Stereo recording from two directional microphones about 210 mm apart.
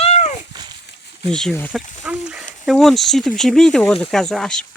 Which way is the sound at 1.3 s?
5° left (ahead or behind).